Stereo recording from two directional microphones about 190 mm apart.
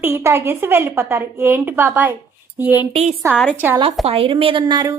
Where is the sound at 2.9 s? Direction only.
35° right (ahead or behind).